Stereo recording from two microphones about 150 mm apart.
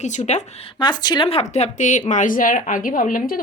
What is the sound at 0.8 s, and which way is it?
A woman's voice, 30° left (ahead or behind).